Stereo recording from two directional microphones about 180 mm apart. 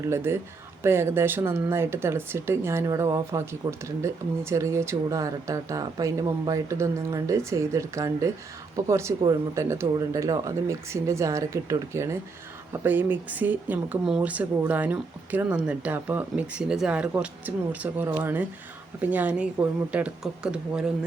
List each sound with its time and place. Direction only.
0.1 s speech: 15° right (ahead or behind)